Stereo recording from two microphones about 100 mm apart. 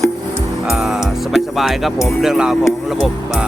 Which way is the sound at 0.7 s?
5° right (ahead or behind).